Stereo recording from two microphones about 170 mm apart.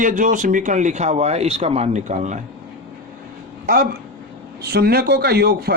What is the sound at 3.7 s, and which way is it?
Speech, 55° right (ahead or behind).